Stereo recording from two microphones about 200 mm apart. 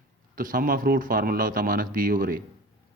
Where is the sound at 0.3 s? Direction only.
45° right (ahead or behind).